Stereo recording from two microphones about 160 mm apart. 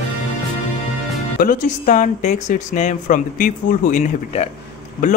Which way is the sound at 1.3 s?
60° left (ahead or behind).